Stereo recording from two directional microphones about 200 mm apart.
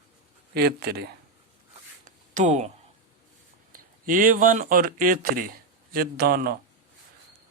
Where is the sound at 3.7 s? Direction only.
40° right (ahead or behind).